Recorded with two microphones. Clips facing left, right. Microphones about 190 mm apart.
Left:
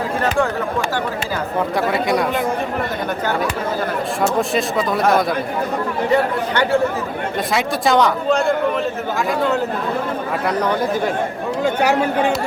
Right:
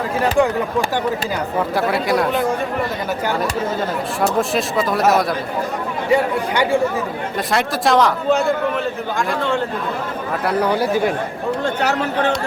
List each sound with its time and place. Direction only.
0.2 s speech: 15° right (ahead or behind)
1.7 s speech: centre (ahead or behind)
4.4 s speech: centre (ahead or behind)
7.5 s speech: centre (ahead or behind)
10.4 s speech: 10° right (ahead or behind)
11.6 s speech: 10° left (ahead or behind)